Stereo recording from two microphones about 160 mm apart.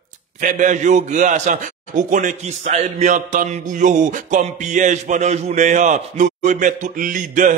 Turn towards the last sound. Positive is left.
turn(degrees=-55)  # may be behind; listen again after turning